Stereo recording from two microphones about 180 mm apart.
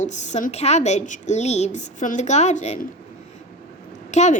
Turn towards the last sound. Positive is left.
turn(degrees=40)  # may be behind; listen again after turning